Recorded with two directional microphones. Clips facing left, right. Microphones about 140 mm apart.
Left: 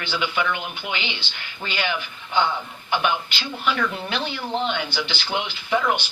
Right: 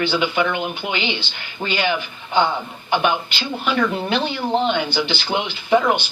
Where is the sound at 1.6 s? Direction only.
25° right (ahead or behind).